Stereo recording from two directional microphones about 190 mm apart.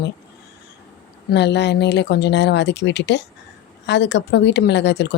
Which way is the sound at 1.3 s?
65° left (ahead or behind).